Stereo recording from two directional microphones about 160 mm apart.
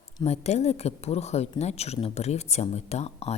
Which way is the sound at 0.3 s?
45° left (ahead or behind).